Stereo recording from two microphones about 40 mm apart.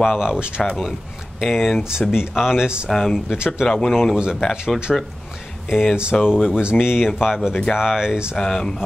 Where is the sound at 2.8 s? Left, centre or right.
Centre.